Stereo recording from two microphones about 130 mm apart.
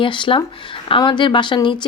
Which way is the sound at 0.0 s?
40° left (ahead or behind).